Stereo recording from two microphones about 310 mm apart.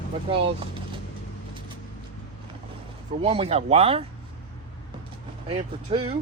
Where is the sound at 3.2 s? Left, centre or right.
Centre.